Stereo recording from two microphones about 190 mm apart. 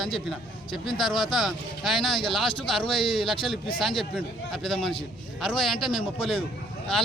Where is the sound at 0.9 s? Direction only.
Centre (ahead or behind).